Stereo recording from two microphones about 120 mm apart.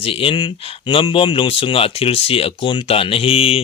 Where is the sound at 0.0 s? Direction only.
50° left (ahead or behind).